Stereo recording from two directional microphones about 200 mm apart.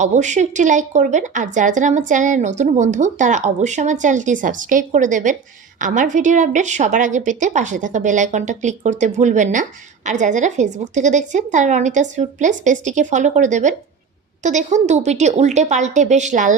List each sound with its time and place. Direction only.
0.0 s a woman's voice: 35° right (ahead or behind)